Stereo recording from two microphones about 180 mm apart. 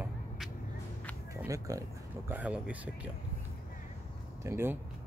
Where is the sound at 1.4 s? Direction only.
20° right (ahead or behind).